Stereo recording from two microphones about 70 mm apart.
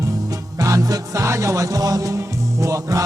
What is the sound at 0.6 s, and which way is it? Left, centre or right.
Music, right.